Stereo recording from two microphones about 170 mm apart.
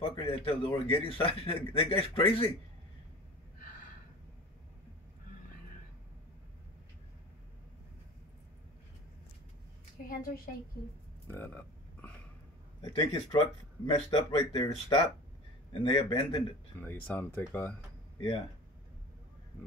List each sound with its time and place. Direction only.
0.3 s speech: 35° left (ahead or behind)
10.0 s a woman's voice: 55° left (ahead or behind)
11.2 s a sound: 10° left (ahead or behind)
12.8 s speech: 25° left (ahead or behind)
16.7 s speech: 10° left (ahead or behind)